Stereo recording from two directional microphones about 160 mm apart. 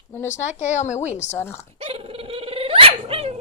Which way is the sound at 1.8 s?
35° right (ahead or behind).